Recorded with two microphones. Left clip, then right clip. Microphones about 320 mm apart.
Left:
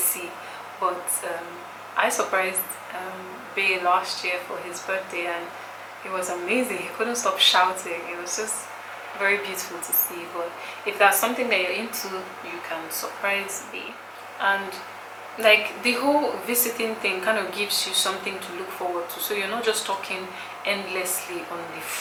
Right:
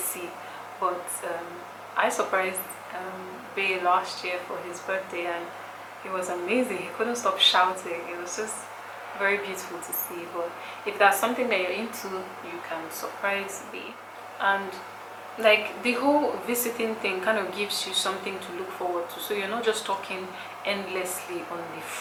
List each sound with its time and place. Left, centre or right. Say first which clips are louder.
0.8 s speech: left 2 dB; centre
9.1 s speech: left 3 dB; centre
10.8 s speech: left 2 dB; centre
13.2 s speech: left 3 dB; centre
15.4 s speech: left 3 dB; centre
16.0 s speech: even; centre
16.5 s speech: left 2 dB; centre